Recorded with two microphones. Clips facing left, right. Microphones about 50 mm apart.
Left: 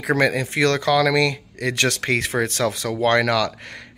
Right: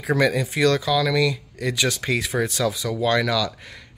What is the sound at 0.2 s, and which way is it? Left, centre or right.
Speech, left.